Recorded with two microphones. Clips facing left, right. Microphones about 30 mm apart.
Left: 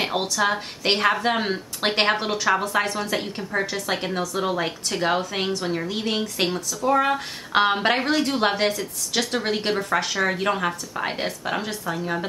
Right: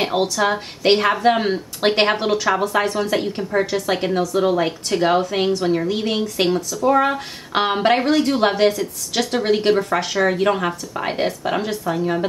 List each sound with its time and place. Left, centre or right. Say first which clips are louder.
0.0 s a woman's voice: right 4 dB; centre